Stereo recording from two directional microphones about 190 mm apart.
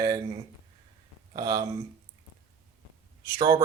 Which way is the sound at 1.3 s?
20° right (ahead or behind).